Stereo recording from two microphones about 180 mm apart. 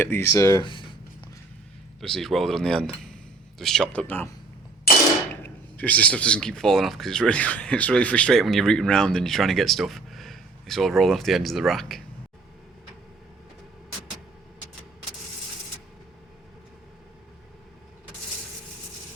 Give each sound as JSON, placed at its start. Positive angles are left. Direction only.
{"t": 0.0, "sound": "speech", "side_deg": 15}
{"t": 0.6, "sound": "speech", "side_deg": 25}
{"t": 2.0, "sound": "speech", "side_deg": 0}
{"t": 5.4, "sound": "speech", "side_deg": 10}